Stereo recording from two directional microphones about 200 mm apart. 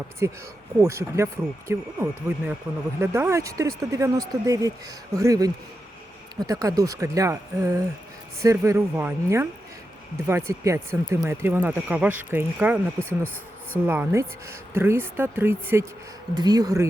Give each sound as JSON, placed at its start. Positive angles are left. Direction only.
{"t": 0.2, "sound": "speech", "side_deg": -15}